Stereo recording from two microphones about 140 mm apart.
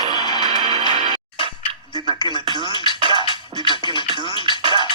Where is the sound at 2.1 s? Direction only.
35° left (ahead or behind).